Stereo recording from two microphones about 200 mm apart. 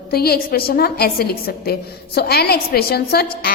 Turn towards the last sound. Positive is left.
turn(degrees=50)  # may be behind; listen again after turning